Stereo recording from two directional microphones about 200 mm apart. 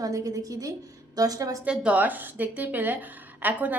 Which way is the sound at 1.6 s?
5° right (ahead or behind).